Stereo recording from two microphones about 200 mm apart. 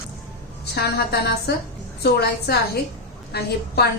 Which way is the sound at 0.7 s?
50° left (ahead or behind).